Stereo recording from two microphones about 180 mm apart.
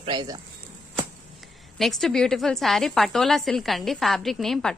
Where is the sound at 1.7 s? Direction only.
Centre (ahead or behind).